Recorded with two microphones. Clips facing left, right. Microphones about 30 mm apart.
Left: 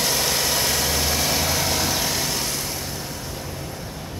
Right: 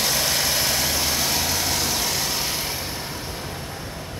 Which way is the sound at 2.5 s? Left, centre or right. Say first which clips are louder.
Right 1 dB; right.